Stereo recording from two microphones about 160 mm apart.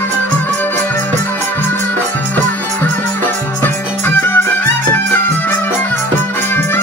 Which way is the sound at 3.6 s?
15° left (ahead or behind).